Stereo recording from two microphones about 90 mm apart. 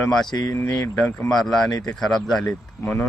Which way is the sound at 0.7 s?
35° left (ahead or behind).